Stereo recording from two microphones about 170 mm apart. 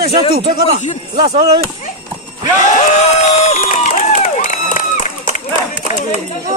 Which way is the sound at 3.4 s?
40° left (ahead or behind).